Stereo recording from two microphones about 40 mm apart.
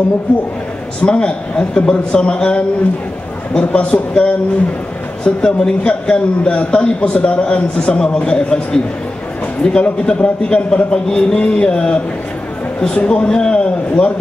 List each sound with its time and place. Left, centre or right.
1.0 s a man's voice: left